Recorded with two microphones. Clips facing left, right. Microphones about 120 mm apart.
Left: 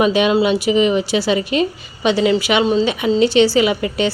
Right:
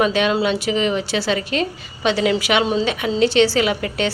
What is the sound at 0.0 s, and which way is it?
A woman's voice, 10° left (ahead or behind).